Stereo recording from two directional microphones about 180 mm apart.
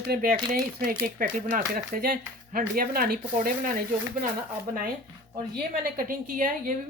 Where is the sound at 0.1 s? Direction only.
55° right (ahead or behind).